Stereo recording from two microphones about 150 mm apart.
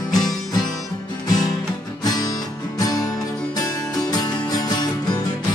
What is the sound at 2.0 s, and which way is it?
Music, 25° left (ahead or behind).